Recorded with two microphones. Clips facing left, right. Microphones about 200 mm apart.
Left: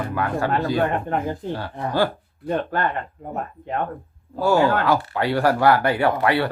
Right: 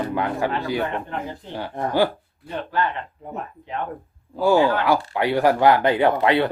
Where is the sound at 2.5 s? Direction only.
50° left (ahead or behind).